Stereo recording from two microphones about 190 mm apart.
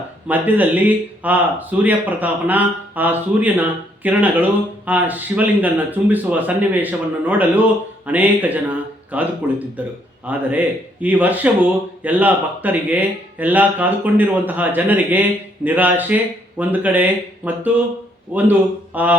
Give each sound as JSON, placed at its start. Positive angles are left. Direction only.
{"t": 0.3, "sound": "speech", "side_deg": -10}